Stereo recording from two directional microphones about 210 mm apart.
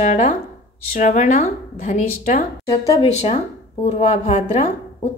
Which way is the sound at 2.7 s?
15° left (ahead or behind).